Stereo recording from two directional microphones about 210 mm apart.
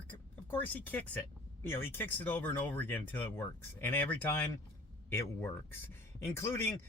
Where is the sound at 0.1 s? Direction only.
10° left (ahead or behind).